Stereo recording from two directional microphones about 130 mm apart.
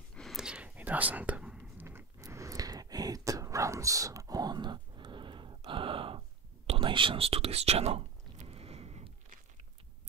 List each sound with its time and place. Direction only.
0.1 s whispering: centre (ahead or behind); by 9.1 s 55° right (ahead or behind)